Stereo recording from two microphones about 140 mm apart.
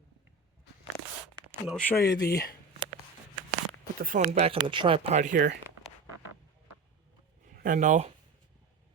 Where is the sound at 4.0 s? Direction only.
85° right.